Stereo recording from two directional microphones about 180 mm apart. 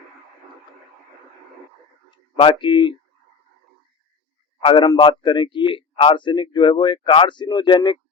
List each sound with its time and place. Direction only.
2.0 s speech: 25° left (ahead or behind)
4.6 s a man's voice: 25° left (ahead or behind)